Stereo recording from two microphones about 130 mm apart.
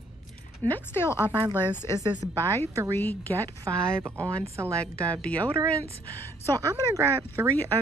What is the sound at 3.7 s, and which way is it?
Speech, 25° right (ahead or behind).